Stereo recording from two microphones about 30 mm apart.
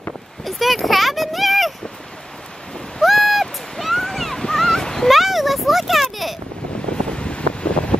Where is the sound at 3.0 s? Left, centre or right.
Centre.